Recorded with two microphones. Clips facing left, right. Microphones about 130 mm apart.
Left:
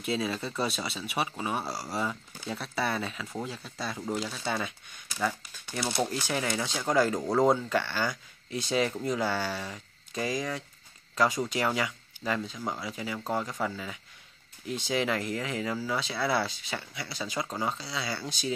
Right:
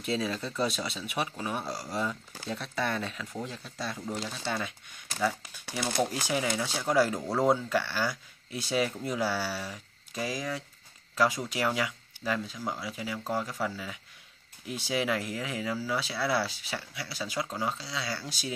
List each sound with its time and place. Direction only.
0.0 s speech: centre (ahead or behind)
1.6 s speech: 30° left (ahead or behind)
1.9 s speech: 5° left (ahead or behind)
6.2 s speech: 5° right (ahead or behind)